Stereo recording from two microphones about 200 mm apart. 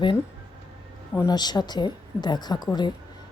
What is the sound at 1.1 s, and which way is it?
A woman's voice, 15° left (ahead or behind).